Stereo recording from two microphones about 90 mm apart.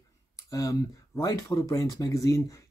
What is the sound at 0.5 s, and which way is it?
Speech, 40° left (ahead or behind).